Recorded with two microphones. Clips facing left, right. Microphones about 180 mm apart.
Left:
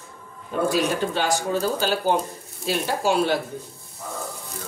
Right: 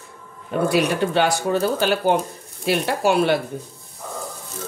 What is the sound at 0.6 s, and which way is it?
A woman's voice, 65° right (ahead or behind).